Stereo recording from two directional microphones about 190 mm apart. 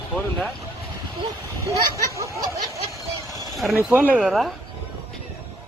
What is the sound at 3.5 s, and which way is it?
Speech, centre (ahead or behind).